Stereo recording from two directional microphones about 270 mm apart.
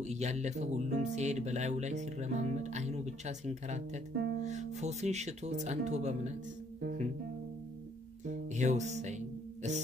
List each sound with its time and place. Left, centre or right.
0.0 s speech: right
8.3 s music: right